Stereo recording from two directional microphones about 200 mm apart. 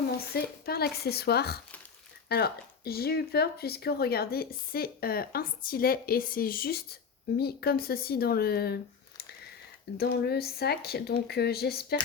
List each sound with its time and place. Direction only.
0.3 s speech: 50° left (ahead or behind)